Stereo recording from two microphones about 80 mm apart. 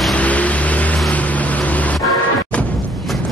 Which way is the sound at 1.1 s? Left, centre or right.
Centre.